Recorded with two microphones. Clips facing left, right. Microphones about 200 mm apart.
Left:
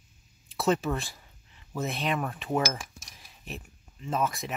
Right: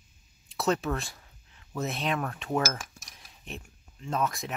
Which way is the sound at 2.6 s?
15° left (ahead or behind).